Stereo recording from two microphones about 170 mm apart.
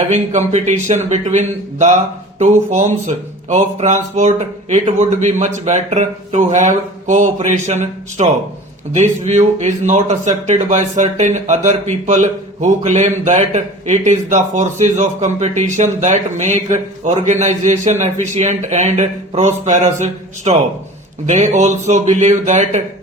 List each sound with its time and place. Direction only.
0.1 s speech: 45° right (ahead or behind)